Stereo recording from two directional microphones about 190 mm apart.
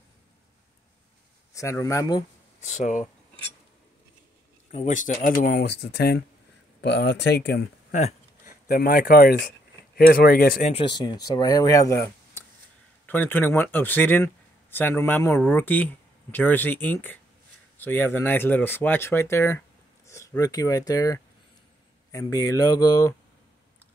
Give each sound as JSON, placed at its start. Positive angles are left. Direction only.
{"t": 1.5, "sound": "speech", "side_deg": 15}
{"t": 2.6, "sound": "speech", "side_deg": 40}
{"t": 4.7, "sound": "speech", "side_deg": 40}
{"t": 8.5, "sound": "speech", "side_deg": 50}
{"t": 10.7, "sound": "speech", "side_deg": 25}